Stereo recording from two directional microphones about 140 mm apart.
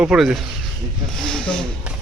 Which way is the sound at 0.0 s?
5° right (ahead or behind).